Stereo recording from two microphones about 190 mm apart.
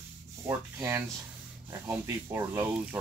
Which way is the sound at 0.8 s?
10° right (ahead or behind).